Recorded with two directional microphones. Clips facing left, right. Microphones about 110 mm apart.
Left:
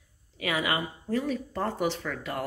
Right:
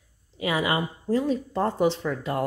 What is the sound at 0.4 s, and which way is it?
Speech, 25° right (ahead or behind).